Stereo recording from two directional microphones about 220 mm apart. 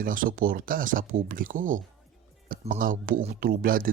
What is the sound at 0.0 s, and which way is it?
Speech, 40° right (ahead or behind).